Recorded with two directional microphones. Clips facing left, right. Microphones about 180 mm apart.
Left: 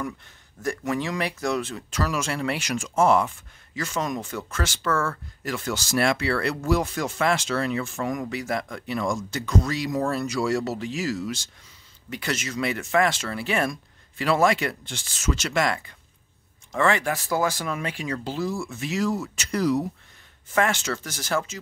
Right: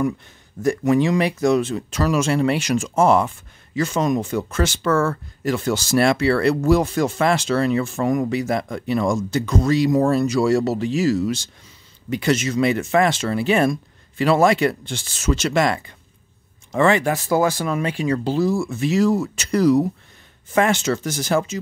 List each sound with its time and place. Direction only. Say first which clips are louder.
0.6 s speech: right 9 dB; 20° right (ahead or behind); by 19.8 s 35° right (ahead or behind)
20.5 s speech: right 6 dB; 20° right (ahead or behind)